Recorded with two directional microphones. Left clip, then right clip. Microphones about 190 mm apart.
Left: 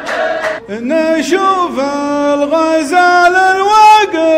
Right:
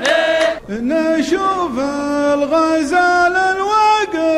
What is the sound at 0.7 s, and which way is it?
Male singing, 20° right (ahead or behind).